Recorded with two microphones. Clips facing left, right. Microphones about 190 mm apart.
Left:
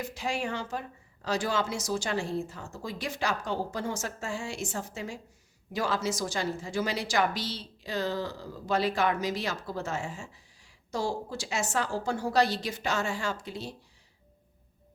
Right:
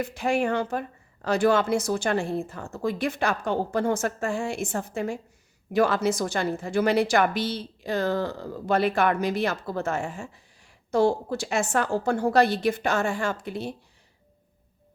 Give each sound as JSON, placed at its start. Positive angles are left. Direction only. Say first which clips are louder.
{"t": 0.0, "sound": "a woman's voice", "louder": "right 8 dB", "side_deg": -55}